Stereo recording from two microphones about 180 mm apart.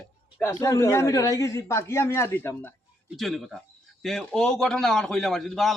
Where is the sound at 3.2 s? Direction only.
Centre (ahead or behind).